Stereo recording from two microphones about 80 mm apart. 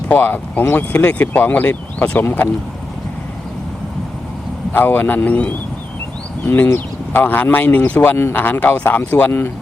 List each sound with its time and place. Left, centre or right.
0.1 s speech: left
4.7 s speech: left